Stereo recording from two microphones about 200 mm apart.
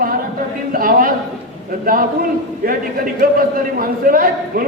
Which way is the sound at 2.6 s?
45° right (ahead or behind).